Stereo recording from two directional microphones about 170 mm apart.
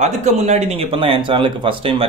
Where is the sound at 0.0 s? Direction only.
40° right (ahead or behind).